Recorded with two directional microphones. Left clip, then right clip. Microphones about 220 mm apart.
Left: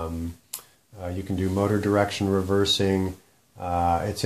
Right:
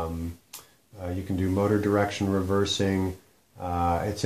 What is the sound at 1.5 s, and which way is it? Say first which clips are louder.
Speech: left 1 dB; 40° left (ahead or behind).